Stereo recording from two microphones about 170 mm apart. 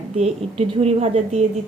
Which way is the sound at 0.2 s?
40° right (ahead or behind).